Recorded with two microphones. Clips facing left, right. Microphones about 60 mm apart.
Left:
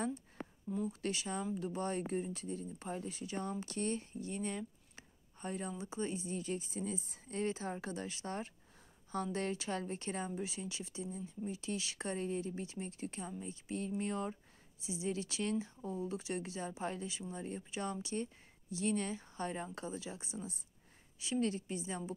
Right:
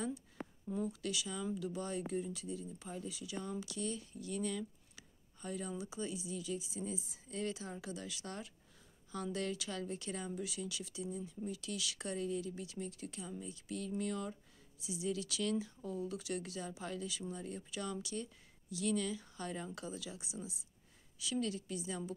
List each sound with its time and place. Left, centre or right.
1.0 s speech: left